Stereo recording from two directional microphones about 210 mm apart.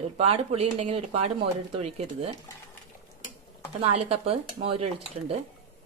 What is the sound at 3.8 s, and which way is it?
Speech, 30° right (ahead or behind).